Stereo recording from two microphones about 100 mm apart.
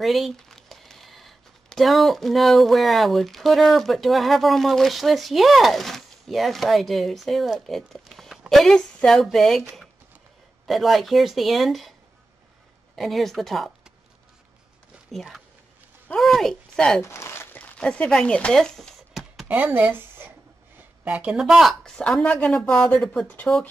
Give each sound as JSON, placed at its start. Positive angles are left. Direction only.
{"t": 0.0, "sound": "speech", "side_deg": 0}
{"t": 10.7, "sound": "a woman's voice", "side_deg": 0}
{"t": 12.9, "sound": "speech", "side_deg": 0}
{"t": 15.0, "sound": "a woman's voice", "side_deg": 0}
{"t": 17.0, "sound": "a sound", "side_deg": 25}
{"t": 17.7, "sound": "a sound", "side_deg": 10}
{"t": 19.4, "sound": "a sound", "side_deg": -15}
{"t": 21.0, "sound": "a woman's voice", "side_deg": -10}
{"t": 23.2, "sound": "speech", "side_deg": 15}